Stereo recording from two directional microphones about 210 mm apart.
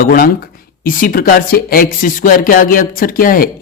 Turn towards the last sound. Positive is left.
turn(degrees=40)  # may be behind; listen again after turning